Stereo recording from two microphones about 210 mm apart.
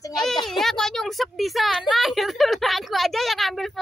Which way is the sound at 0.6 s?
Centre (ahead or behind).